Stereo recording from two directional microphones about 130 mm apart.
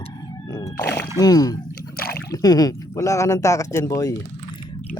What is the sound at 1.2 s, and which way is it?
Speech, 30° left (ahead or behind).